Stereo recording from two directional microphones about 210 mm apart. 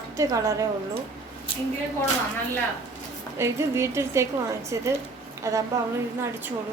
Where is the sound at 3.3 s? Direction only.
15° right (ahead or behind).